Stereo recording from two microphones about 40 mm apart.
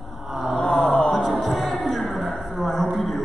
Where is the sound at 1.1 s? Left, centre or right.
Centre.